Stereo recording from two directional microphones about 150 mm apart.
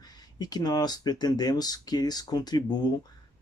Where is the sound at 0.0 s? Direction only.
25° left (ahead or behind).